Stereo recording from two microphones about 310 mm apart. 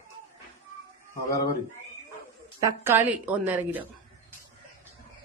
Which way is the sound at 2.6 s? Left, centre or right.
Centre.